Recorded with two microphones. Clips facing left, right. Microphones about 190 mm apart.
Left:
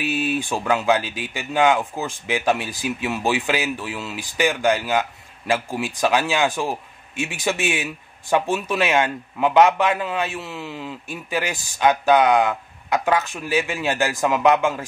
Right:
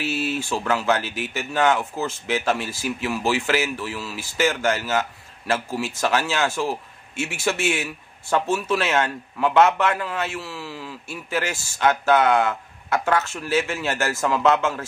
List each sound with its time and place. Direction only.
0.0 s speech: 15° left (ahead or behind)